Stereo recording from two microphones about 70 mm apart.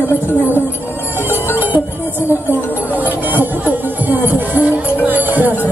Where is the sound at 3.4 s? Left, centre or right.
Right.